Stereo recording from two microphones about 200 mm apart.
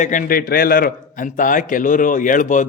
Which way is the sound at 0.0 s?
40° left (ahead or behind).